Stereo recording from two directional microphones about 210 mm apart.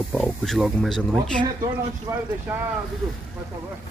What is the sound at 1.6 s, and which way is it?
Speech, 15° right (ahead or behind).